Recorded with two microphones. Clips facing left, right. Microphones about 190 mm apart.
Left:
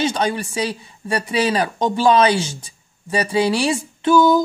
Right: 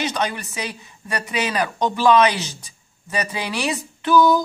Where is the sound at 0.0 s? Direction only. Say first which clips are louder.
Left 4 dB; 30° left (ahead or behind).